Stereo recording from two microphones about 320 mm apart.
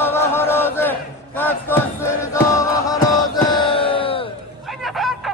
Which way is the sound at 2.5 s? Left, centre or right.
Centre.